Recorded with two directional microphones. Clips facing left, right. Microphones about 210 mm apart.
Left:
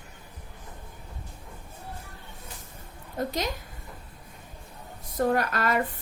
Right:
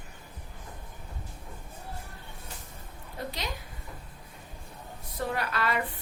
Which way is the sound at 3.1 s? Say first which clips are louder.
Left 7 dB; 45° left (ahead or behind).